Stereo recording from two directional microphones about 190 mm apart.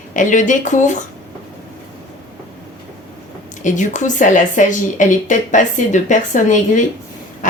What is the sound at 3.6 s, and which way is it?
Speech, 40° left (ahead or behind).